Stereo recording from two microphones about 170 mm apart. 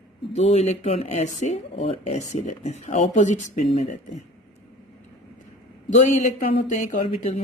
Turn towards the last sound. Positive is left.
turn(degrees=45)  # may be behind; listen again after turning